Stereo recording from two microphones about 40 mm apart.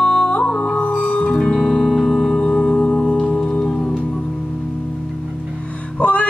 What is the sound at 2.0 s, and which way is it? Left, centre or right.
Music, centre.